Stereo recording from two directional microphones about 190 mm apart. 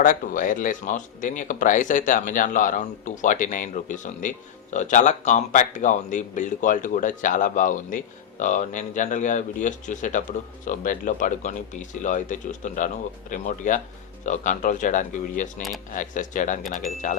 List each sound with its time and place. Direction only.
0.0 s speech: 45° left (ahead or behind)